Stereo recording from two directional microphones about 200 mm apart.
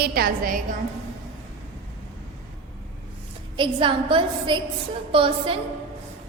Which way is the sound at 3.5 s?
25° right (ahead or behind).